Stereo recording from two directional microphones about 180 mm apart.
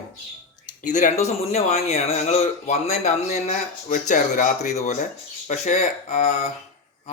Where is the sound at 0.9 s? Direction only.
45° left (ahead or behind).